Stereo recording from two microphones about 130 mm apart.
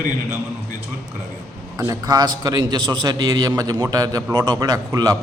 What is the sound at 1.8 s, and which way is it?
A man's voice, 30° right (ahead or behind).